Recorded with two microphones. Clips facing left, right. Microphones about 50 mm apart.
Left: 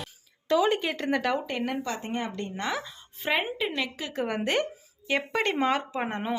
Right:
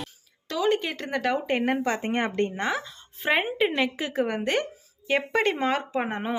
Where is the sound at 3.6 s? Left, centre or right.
Right.